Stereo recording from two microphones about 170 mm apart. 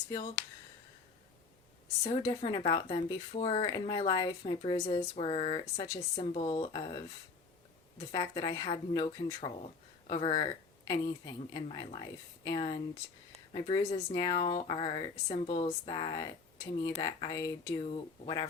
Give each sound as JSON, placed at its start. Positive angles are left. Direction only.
{"t": 2.0, "sound": "a woman's voice", "side_deg": 30}